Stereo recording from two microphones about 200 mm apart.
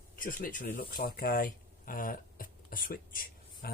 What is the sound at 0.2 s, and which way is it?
Speech, 45° left (ahead or behind).